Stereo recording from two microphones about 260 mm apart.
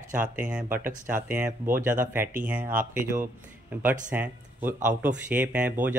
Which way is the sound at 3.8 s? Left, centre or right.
Centre.